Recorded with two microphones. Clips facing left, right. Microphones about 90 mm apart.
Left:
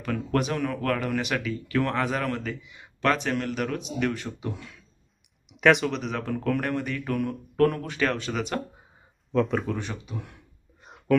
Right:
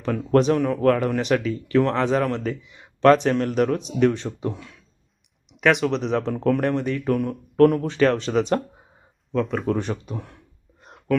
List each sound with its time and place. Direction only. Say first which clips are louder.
0.0 s speech: right 8 dB; 30° right (ahead or behind)
5.5 s speech: right 1 dB; centre (ahead or behind)
6.0 s speech: right 7 dB; 35° right (ahead or behind)
9.3 s speech: even; centre (ahead or behind)
9.6 s speech: right 7 dB; 40° right (ahead or behind)
10.8 s whispering: even; centre (ahead or behind)